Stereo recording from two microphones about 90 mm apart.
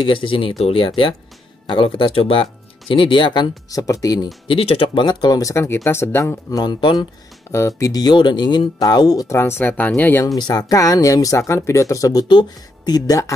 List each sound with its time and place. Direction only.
0.0 s speech: 70° left (ahead or behind); by 2.4 s 85° left
2.9 s speech: 70° left (ahead or behind)
3.7 s speech: 40° left (ahead or behind)
4.5 s speech: 90° left
5.0 s speech: 50° left (ahead or behind); by 6.3 s 30° left (ahead or behind)
6.5 s speech: 55° left (ahead or behind)
7.5 s speech: 30° left (ahead or behind)
7.9 s speech: 50° left (ahead or behind)
9.3 s speech: 30° left (ahead or behind)
10.2 s speech: 45° left (ahead or behind)